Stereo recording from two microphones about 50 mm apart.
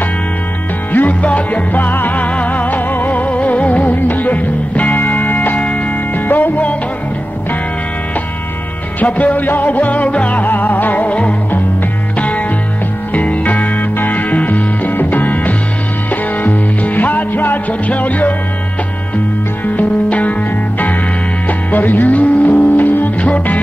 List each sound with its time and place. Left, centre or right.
0.9 s music: left
9.0 s music: left
19.6 s music: left
21.5 s music: left